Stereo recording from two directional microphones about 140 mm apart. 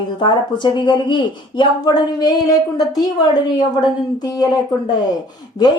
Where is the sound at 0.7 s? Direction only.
35° left (ahead or behind).